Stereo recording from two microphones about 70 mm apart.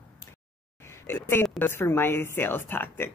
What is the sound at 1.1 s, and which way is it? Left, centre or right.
A woman's voice, left.